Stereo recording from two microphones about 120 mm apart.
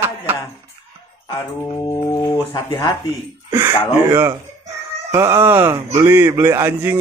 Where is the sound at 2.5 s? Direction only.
45° left (ahead or behind).